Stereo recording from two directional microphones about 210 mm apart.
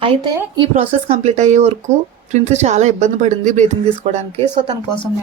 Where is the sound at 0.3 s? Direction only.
20° right (ahead or behind).